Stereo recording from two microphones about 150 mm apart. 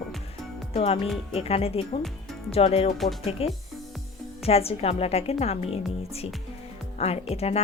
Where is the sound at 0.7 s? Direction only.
40° left (ahead or behind).